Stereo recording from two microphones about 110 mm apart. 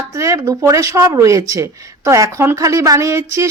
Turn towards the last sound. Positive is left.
turn(degrees=-25)  # may be behind; listen again after turning